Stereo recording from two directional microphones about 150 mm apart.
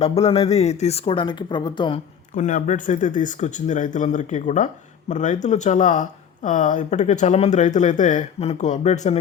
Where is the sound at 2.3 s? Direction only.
55° left (ahead or behind).